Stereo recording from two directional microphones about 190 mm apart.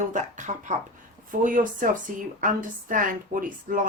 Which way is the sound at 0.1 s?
40° right (ahead or behind).